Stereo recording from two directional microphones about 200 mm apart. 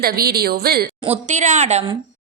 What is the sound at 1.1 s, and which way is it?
Speech, 35° right (ahead or behind).